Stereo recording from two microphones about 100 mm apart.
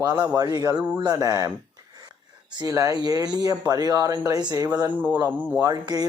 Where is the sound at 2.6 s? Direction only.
35° right (ahead or behind).